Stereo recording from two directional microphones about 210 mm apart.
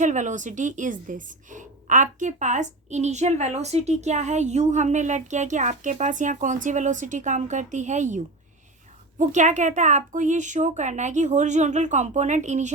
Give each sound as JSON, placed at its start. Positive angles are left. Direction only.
{"t": 0.0, "sound": "a woman's voice", "side_deg": -35}